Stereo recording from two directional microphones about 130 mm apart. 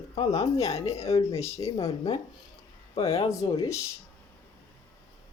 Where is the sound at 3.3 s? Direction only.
25° left (ahead or behind).